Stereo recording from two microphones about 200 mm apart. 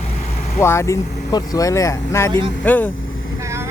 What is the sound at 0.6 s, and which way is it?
Speech, 15° left (ahead or behind).